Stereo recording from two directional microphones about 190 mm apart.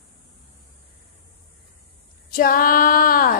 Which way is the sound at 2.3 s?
50° left (ahead or behind).